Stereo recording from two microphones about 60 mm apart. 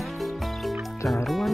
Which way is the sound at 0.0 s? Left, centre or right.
Centre.